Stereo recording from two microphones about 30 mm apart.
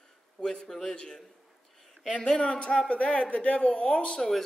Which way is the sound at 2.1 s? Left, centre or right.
Left.